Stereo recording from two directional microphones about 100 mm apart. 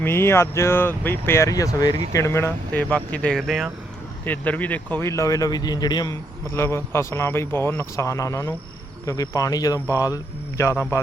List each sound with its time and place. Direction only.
0.0 s speech: 25° left (ahead or behind); by 2.0 s 40° left (ahead or behind)
2.1 s speech: 30° left (ahead or behind)
2.9 s speech: 15° left (ahead or behind)
3.3 s speech: centre (ahead or behind)
4.3 s speech: 15° left (ahead or behind); by 6.1 s 40° left (ahead or behind)
6.5 s speech: 25° left (ahead or behind)